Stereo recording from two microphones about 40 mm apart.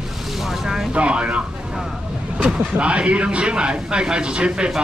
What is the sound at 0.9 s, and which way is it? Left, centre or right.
Speech, right.